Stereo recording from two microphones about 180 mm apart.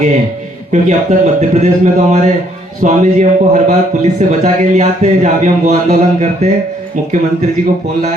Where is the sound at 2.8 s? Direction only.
45° right (ahead or behind).